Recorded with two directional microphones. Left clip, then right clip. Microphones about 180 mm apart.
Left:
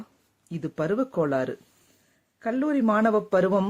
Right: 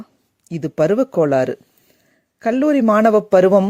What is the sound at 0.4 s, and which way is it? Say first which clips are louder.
Speech: right 12 dB; 40° right (ahead or behind).